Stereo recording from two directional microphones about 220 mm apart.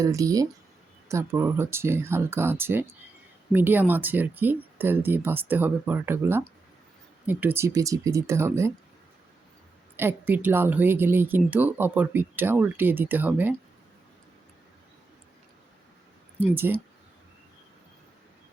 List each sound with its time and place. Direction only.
0.0 s speech: 15° right (ahead or behind)
10.0 s speech: 10° right (ahead or behind)
16.4 s speech: 10° right (ahead or behind)